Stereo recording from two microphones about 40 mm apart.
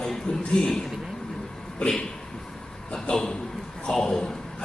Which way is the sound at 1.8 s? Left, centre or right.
Centre.